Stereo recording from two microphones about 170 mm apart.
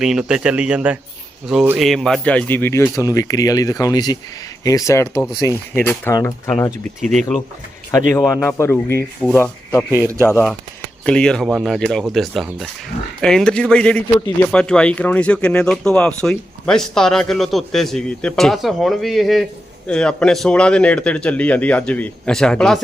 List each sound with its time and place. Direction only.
0.0 s speech: 5° right (ahead or behind); by 6.7 s 15° left (ahead or behind)
8.3 s speech: 15° left (ahead or behind)
9.9 s a man's voice: 15° right (ahead or behind)
11.0 s speech: 5° left (ahead or behind)